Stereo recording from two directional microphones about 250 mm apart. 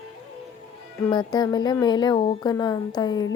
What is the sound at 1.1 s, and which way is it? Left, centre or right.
Speech, centre.